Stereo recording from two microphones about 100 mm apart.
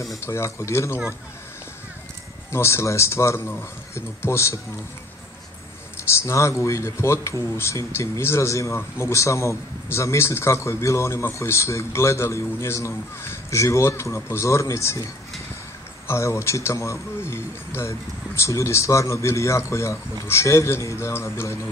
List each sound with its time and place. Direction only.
0.2 s speech: 25° left (ahead or behind)
2.5 s speech: 25° left (ahead or behind)
6.0 s speech: 30° left (ahead or behind)
16.1 s speech: 25° left (ahead or behind)